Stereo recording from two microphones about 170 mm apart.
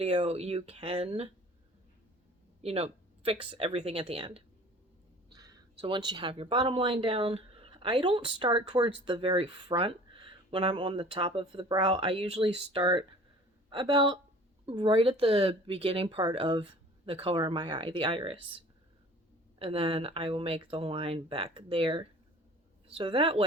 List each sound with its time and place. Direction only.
0.0 s speech: 40° right (ahead or behind)
2.6 s speech: 40° right (ahead or behind)
5.3 s speech: 20° right (ahead or behind)